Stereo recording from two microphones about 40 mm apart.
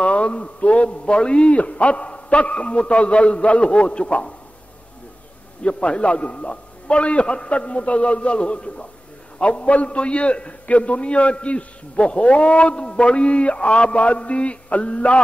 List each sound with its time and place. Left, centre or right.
0.0 s a man's voice: left
5.6 s a man's voice: left